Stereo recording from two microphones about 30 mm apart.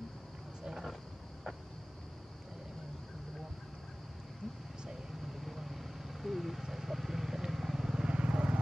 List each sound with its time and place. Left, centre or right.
5.2 s vehicle: centre
8.0 s vehicle: right